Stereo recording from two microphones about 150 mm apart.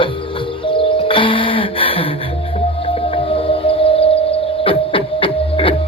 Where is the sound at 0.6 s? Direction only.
35° left (ahead or behind).